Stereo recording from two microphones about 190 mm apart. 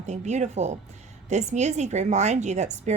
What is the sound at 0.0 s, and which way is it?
A woman's voice, 35° right (ahead or behind).